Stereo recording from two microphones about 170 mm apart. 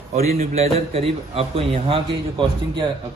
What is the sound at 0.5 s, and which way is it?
A man's voice, 35° right (ahead or behind).